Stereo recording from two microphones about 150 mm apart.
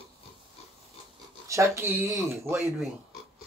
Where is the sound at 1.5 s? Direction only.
20° right (ahead or behind).